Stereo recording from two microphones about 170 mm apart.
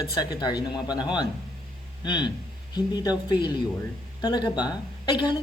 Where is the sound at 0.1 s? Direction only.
25° left (ahead or behind).